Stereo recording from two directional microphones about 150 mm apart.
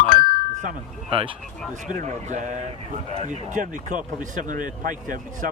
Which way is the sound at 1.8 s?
55° right (ahead or behind).